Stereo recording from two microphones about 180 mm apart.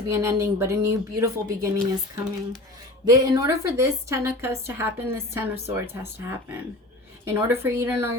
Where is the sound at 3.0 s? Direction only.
20° right (ahead or behind).